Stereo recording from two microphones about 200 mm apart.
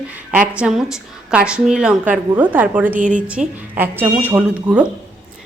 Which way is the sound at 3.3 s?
5° right (ahead or behind).